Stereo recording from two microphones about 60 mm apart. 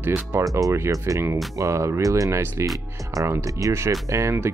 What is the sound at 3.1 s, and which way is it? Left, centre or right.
Speech, right.